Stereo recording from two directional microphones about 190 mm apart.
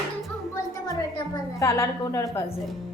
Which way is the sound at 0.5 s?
15° left (ahead or behind).